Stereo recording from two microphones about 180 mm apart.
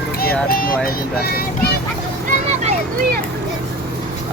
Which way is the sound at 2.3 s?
40° right (ahead or behind).